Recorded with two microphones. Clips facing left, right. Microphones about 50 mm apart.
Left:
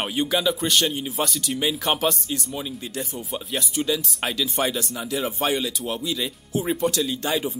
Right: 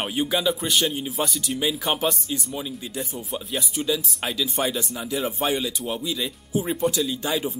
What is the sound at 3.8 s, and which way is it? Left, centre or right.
Speech, centre.